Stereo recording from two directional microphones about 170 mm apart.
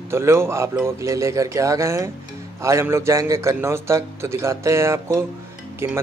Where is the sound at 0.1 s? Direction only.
15° right (ahead or behind).